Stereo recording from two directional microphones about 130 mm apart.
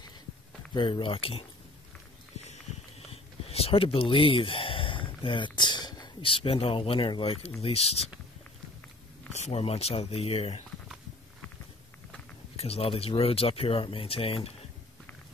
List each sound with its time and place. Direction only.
0.7 s speech: 40° left (ahead or behind)
3.1 s speech: 50° left (ahead or behind)
9.3 s speech: 55° left (ahead or behind)
12.5 s speech: 50° left (ahead or behind)